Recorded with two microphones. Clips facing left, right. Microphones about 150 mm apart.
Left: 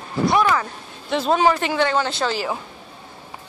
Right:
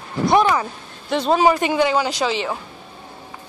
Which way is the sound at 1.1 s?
Centre (ahead or behind).